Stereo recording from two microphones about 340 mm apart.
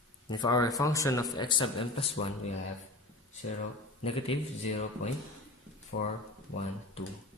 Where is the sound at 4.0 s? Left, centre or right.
Centre.